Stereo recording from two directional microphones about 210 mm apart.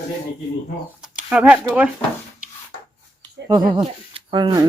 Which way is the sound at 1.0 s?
5° right (ahead or behind).